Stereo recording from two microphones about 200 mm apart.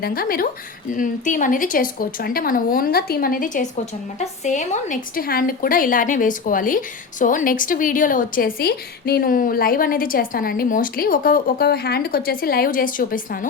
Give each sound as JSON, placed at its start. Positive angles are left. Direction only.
{"t": 0.0, "sound": "a woman's voice", "side_deg": 45}